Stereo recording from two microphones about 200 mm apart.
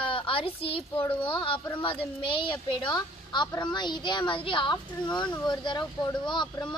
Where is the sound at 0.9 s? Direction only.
10° left (ahead or behind).